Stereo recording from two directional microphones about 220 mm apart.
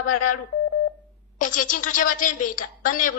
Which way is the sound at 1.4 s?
35° left (ahead or behind).